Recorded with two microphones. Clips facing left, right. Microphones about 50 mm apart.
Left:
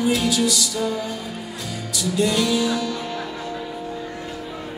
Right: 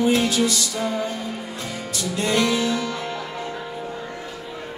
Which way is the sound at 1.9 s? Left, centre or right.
Right.